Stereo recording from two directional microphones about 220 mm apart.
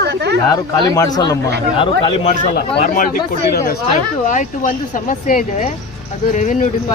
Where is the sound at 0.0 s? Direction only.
50° right (ahead or behind).